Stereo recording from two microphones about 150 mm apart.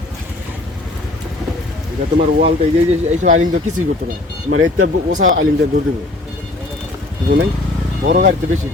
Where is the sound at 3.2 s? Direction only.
55° right (ahead or behind).